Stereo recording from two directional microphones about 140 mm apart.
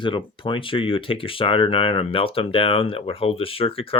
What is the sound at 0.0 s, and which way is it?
Speech, 35° left (ahead or behind).